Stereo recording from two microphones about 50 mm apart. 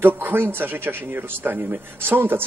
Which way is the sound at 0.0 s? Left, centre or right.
Right.